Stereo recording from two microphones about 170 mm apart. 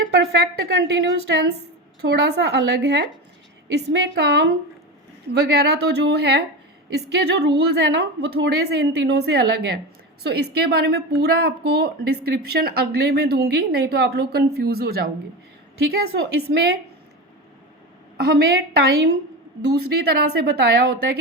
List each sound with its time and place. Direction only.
0.1 s a woman's voice: 80° right
5.3 s a woman's voice: 75° right (ahead or behind)
18.2 s a woman's voice: 70° right (ahead or behind)